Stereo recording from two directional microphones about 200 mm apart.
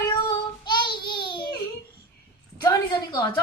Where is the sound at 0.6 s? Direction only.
20° left (ahead or behind).